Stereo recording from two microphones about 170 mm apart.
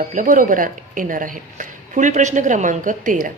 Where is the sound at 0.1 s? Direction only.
50° right (ahead or behind).